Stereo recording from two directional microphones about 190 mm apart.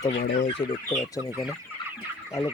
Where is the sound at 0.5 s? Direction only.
20° left (ahead or behind).